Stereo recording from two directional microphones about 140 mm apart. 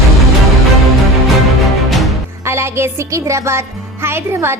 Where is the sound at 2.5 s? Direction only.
20° right (ahead or behind).